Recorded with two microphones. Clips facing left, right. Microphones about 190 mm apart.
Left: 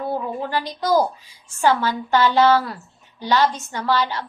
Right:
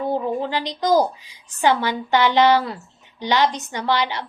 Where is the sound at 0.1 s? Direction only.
20° right (ahead or behind).